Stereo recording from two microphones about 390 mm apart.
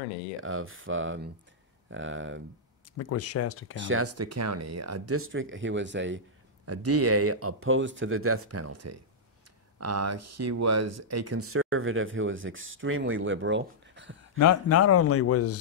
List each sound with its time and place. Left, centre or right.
0.4 s speech: right
3.0 s a man's voice: left
3.7 s speech: right
14.4 s a man's voice: left